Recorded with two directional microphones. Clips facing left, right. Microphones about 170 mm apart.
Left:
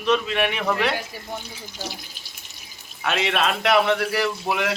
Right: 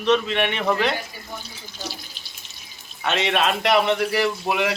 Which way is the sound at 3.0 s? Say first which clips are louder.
Right 1 dB; centre (ahead or behind).